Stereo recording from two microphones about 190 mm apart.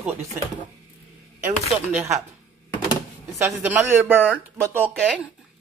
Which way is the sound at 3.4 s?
10° right (ahead or behind).